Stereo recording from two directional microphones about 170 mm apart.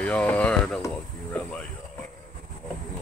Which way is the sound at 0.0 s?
10° left (ahead or behind).